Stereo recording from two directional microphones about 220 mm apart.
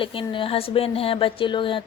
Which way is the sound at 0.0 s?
25° left (ahead or behind).